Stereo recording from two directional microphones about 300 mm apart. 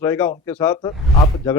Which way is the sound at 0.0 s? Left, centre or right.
Centre.